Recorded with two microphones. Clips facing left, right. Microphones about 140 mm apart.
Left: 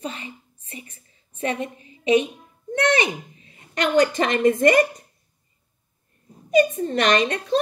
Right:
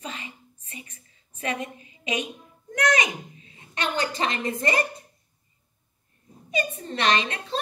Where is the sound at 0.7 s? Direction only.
35° left (ahead or behind).